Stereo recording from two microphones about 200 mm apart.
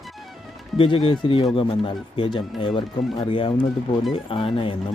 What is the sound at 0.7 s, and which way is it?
A man's voice, 25° left (ahead or behind).